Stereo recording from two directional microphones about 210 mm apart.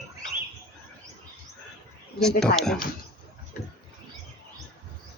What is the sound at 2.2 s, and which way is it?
Speech, centre (ahead or behind).